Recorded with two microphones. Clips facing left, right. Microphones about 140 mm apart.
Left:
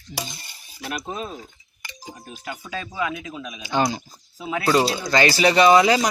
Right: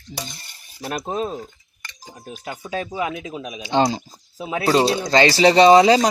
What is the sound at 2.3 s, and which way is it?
Speech, 25° right (ahead or behind).